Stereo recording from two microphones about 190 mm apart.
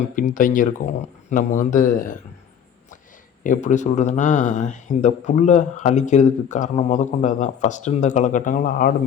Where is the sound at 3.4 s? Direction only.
40° left (ahead or behind).